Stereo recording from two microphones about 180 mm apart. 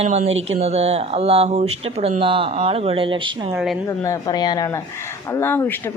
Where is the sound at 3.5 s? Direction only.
Centre (ahead or behind).